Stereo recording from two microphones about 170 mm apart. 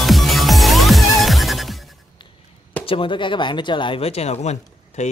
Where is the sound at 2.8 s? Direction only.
30° left (ahead or behind).